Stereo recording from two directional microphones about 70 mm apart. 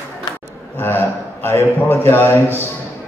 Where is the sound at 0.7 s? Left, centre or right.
Left.